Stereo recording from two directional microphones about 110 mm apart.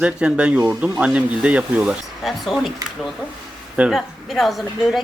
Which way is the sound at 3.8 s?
Centre (ahead or behind).